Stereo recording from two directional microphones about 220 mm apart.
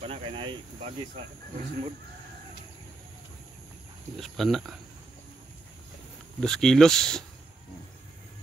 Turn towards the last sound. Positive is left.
turn(degrees=5)  # may be behind; listen again after turning